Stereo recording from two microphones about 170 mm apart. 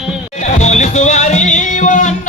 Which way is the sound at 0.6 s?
40° left (ahead or behind).